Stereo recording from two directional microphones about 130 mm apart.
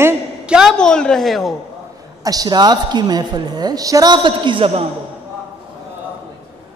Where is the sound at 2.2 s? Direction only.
30° right (ahead or behind).